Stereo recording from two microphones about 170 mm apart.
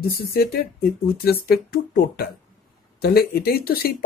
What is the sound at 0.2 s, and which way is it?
Speech, 65° left (ahead or behind).